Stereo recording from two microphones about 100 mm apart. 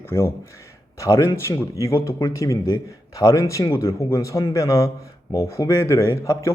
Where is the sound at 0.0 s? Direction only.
25° left (ahead or behind).